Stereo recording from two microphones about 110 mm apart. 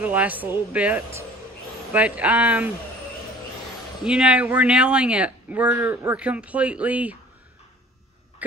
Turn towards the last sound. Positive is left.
turn(degrees=-15)  # may be behind; listen again after turning